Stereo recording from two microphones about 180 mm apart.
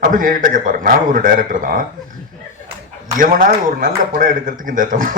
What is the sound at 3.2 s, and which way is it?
Speech, 50° right (ahead or behind).